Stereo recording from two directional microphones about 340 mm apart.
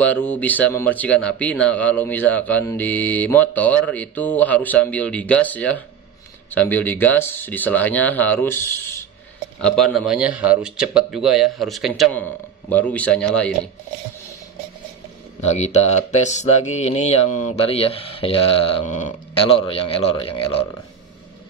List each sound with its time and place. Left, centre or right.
0.0 s speech: centre
15.4 s speech: centre